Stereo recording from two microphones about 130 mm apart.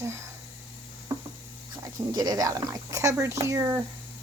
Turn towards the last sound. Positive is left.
turn(degrees=-25)  # may be behind; listen again after turning